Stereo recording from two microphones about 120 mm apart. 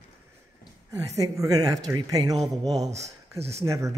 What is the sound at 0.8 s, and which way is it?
Speech, 25° right (ahead or behind).